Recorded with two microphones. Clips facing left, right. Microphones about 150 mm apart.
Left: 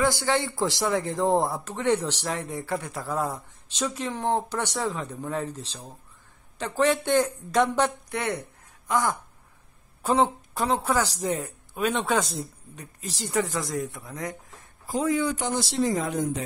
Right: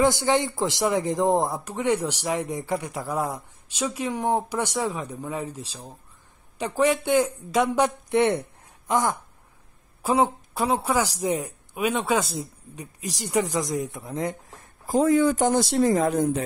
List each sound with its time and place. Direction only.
0.0 s speech: 20° right (ahead or behind)
8.1 s a sound: 25° right (ahead or behind)
10.0 s speech: 10° right (ahead or behind); by 14.3 s 25° right (ahead or behind)
14.9 s speech: 45° right (ahead or behind)